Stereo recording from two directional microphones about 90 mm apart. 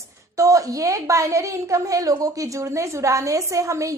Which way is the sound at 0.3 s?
40° right (ahead or behind).